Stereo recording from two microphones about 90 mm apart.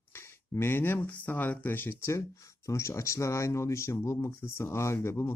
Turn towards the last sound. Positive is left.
turn(degrees=30)  # may be behind; listen again after turning